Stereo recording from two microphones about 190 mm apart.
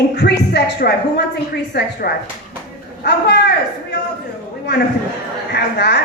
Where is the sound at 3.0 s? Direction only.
60° left (ahead or behind).